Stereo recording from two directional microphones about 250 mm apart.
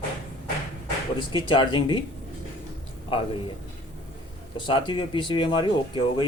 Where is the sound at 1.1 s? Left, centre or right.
Centre.